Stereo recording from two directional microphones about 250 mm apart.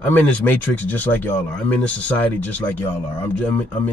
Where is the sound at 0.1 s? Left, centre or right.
Centre.